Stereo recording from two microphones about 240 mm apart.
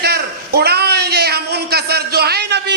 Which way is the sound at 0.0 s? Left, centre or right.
Right.